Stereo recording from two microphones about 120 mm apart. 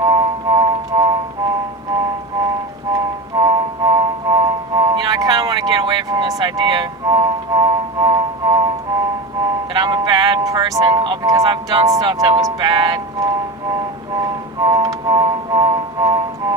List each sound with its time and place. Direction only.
0.0 s music: 30° right (ahead or behind)
2.9 s music: 30° right (ahead or behind)
9.7 s music: 35° right (ahead or behind)
11.2 s speech: 30° right (ahead or behind)
13.7 s music: 30° right (ahead or behind)